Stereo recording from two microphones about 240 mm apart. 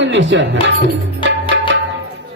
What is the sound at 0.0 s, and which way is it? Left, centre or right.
Music, right.